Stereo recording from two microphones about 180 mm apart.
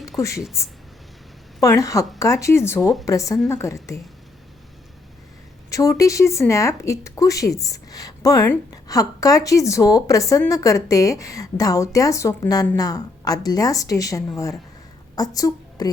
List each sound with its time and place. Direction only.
0.2 s speech: 15° left (ahead or behind)
1.6 s speech: 20° left (ahead or behind)
5.7 s a woman's voice: 20° left (ahead or behind)